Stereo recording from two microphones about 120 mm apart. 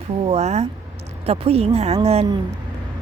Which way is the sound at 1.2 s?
55° right (ahead or behind).